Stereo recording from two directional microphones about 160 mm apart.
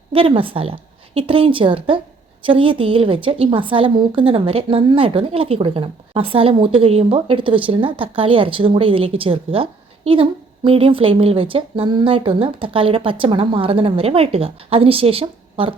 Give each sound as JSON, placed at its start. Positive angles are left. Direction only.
{"t": 0.1, "sound": "a woman's voice", "side_deg": -35}